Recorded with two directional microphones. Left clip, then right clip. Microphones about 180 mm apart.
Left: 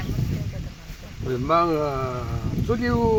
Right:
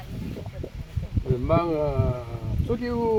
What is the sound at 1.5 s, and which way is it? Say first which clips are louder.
Speech: left 3 dB; 25° left (ahead or behind).